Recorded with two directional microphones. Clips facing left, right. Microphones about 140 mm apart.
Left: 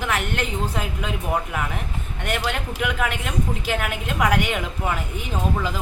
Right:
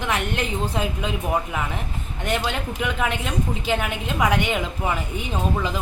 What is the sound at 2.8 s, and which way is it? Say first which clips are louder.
A woman's voice: right 1 dB; centre (ahead or behind).